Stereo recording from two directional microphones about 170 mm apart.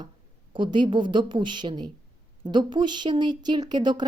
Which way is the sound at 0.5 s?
30° right (ahead or behind).